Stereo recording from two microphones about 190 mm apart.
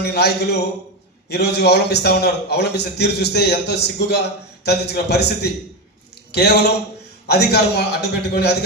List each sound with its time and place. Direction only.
0.0 s a man's voice: 60° left (ahead or behind)